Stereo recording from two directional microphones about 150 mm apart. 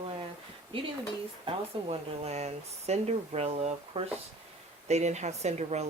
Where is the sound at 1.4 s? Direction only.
45° right (ahead or behind).